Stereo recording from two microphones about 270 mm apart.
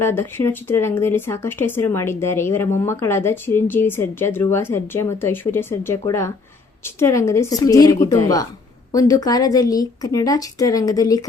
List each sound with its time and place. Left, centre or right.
0.0 s speech: centre